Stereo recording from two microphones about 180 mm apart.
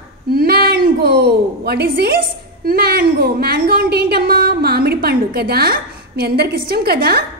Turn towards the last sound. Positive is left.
turn(degrees=-60)  # may be behind; listen again after turning